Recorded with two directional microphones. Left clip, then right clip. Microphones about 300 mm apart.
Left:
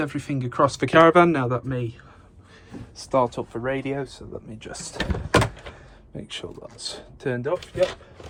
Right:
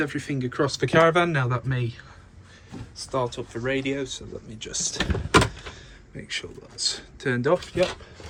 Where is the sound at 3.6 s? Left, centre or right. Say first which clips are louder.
Right 1 dB; centre.